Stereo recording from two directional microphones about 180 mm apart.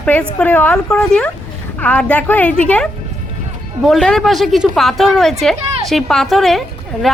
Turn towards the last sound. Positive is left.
turn(degrees=0)  # may be behind; listen again after turning